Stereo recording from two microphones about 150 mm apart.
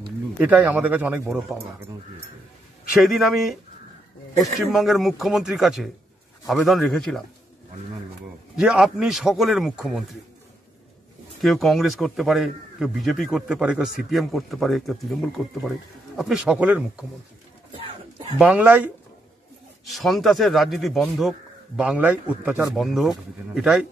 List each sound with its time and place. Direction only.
0.4 s speech: 10° right (ahead or behind)
2.9 s a man's voice: centre (ahead or behind)
8.5 s a man's voice: 5° right (ahead or behind)
11.4 s a man's voice: centre (ahead or behind)
17.7 s a sound: 40° right (ahead or behind)
18.4 s speech: 10° right (ahead or behind)
19.9 s a man's voice: centre (ahead or behind)